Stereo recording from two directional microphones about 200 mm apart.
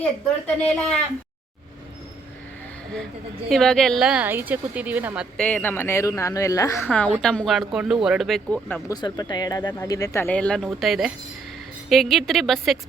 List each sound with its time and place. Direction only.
0.4 s speech: 5° left (ahead or behind)
3.5 s speech: centre (ahead or behind)
5.5 s speech: 10° left (ahead or behind)
8.9 s speech: 20° left (ahead or behind); by 12.8 s centre (ahead or behind)